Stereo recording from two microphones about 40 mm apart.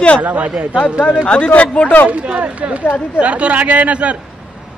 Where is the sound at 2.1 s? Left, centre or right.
Right.